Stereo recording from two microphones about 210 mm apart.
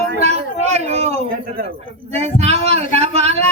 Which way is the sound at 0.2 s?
30° right (ahead or behind).